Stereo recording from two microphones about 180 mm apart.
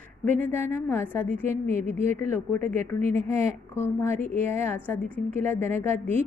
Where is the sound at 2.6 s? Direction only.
40° right (ahead or behind).